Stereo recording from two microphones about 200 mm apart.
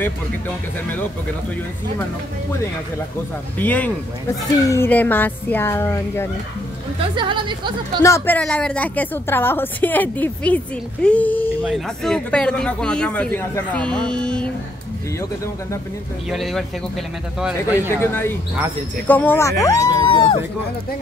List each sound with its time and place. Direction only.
3.5 s a woman's voice: 10° left (ahead or behind)
7.2 s a woman's voice: 25° right (ahead or behind)
8.0 s a woman's voice: 10° left (ahead or behind)
16.3 s speech: centre (ahead or behind)
18.0 s a woman's voice: 10° left (ahead or behind)